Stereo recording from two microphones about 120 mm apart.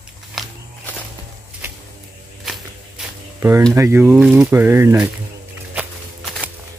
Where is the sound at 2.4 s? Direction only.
Centre (ahead or behind).